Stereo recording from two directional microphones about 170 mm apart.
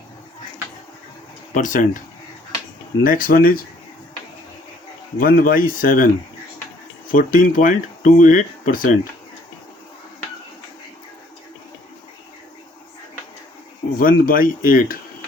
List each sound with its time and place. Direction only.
1.5 s speech: 50° left (ahead or behind)
3.0 s speech: 55° left (ahead or behind)
5.1 s speech: 55° left (ahead or behind)
7.1 s speech: 55° left (ahead or behind)
14.0 s speech: 55° left (ahead or behind)